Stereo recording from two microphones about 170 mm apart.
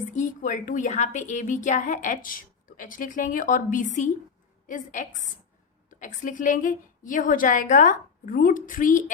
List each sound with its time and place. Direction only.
0.2 s a woman's voice: 50° left (ahead or behind)